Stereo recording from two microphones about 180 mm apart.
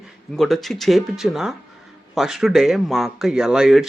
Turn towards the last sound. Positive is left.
turn(degrees=-5)  # may be behind; listen again after turning